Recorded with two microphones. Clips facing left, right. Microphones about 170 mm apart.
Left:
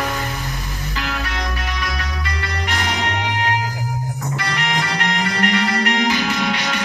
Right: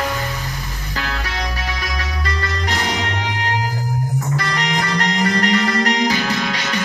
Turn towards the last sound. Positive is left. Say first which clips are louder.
# right 1 dB
turn(degrees=-40)  # may be behind; listen again after turning